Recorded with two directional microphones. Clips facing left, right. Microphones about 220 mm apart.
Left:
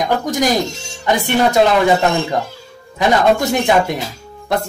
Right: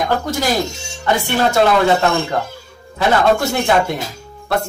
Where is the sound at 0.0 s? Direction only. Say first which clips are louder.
Left 2 dB; 15° left (ahead or behind).